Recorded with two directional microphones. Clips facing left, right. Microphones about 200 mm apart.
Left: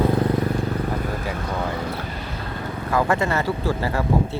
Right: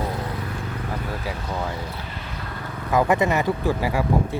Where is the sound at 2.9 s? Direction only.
20° right (ahead or behind).